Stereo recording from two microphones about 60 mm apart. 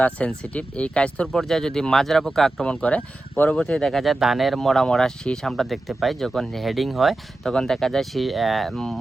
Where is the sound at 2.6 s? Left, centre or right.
Centre.